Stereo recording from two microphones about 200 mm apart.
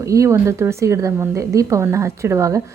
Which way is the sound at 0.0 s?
15° right (ahead or behind).